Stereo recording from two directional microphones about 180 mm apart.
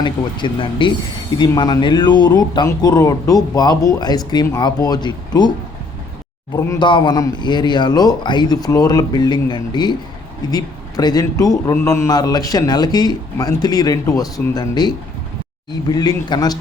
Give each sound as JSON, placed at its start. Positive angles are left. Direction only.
{"t": 0.0, "sound": "a man's voice", "side_deg": 25}
{"t": 6.6, "sound": "a man's voice", "side_deg": 20}